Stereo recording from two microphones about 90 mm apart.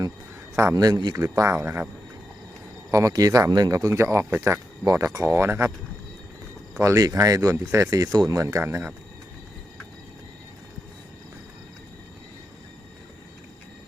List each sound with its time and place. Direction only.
0.5 s a man's voice: 35° right (ahead or behind)
1.1 s speech: 30° right (ahead or behind)
2.9 s speech: 40° right (ahead or behind)
6.7 s speech: 35° right (ahead or behind)